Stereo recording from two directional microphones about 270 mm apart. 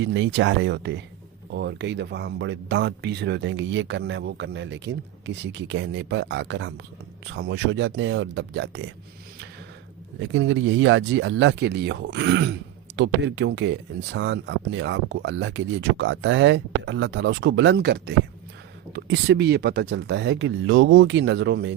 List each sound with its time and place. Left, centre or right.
0.0 s speech: right
10.2 s speech: right